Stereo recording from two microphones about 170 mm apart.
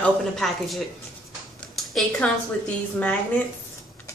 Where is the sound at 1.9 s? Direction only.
5° left (ahead or behind).